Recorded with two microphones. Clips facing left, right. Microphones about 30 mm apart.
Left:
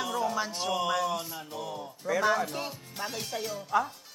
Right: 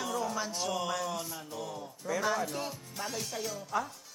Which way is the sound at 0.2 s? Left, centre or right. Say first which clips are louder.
Left 4 dB; left.